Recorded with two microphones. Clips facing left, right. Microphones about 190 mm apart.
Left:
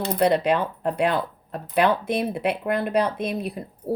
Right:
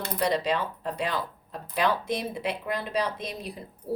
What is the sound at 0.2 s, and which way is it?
Speech, 60° left (ahead or behind).